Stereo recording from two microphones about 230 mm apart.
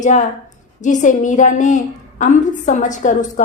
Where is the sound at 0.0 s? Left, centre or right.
Left.